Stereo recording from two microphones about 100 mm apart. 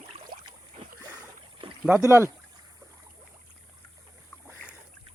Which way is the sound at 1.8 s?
25° right (ahead or behind).